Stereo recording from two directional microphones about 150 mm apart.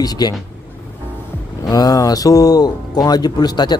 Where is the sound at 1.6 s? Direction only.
25° left (ahead or behind).